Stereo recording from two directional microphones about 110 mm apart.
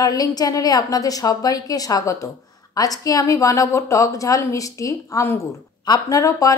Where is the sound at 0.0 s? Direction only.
35° left (ahead or behind).